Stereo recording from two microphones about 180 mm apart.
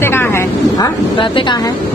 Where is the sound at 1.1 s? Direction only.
30° left (ahead or behind).